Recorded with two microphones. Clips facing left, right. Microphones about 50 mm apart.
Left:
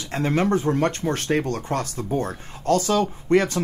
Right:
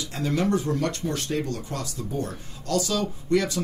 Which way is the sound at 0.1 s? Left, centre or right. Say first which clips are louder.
Left 4 dB; left.